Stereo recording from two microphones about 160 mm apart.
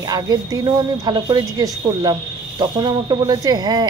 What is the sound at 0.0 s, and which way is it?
Speech, 25° right (ahead or behind).